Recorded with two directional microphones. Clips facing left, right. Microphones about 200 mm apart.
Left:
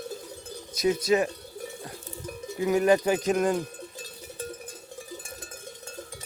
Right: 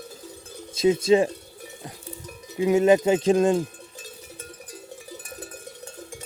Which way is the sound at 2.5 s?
25° right (ahead or behind).